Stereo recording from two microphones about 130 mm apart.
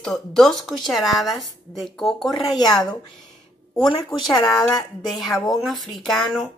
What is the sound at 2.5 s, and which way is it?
Speech, 30° left (ahead or behind).